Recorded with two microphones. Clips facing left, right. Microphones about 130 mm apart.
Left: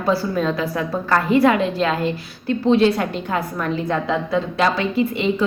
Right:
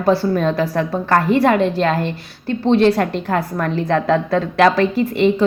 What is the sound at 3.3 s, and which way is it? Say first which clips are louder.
A woman's voice: right 3 dB; 50° right (ahead or behind).